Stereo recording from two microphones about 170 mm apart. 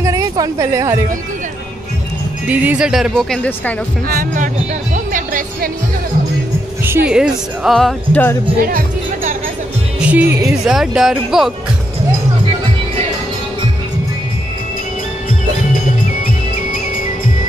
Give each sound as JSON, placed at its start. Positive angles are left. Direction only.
{"t": 0.0, "sound": "a sound", "side_deg": -20}
{"t": 2.4, "sound": "speech", "side_deg": -10}
{"t": 4.1, "sound": "speech", "side_deg": -55}
{"t": 4.9, "sound": "music", "side_deg": -50}
{"t": 7.1, "sound": "speech", "side_deg": -5}
{"t": 8.6, "sound": "music", "side_deg": -55}
{"t": 9.9, "sound": "speech", "side_deg": -10}